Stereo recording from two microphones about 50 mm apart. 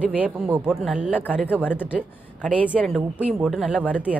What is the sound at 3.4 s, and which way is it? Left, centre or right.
Speech, centre.